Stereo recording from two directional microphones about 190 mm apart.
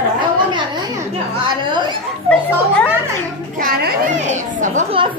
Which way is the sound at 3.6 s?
45° right (ahead or behind).